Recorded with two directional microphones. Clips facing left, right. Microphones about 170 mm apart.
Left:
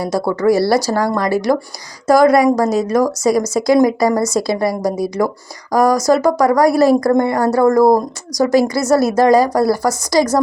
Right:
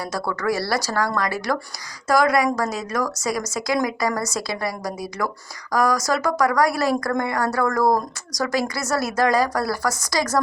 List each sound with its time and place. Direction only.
0.0 s a woman's voice: 25° left (ahead or behind)
5.7 s a woman's voice: 25° left (ahead or behind)